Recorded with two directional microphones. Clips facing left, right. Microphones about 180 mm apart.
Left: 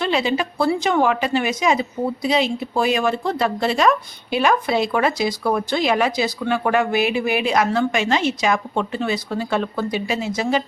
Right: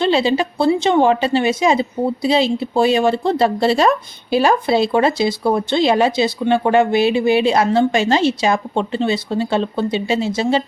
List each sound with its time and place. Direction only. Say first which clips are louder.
0.0 s a woman's voice: right 5 dB; 30° right (ahead or behind)